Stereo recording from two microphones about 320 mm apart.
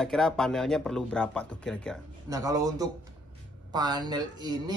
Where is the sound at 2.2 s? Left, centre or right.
Centre.